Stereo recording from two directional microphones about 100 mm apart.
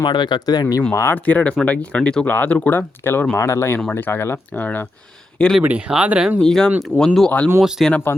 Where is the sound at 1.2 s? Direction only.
15° left (ahead or behind).